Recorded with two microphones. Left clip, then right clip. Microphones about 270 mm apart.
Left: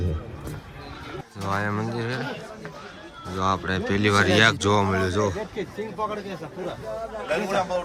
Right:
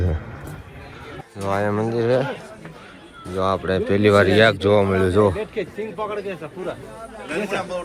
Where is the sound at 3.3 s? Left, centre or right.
Centre.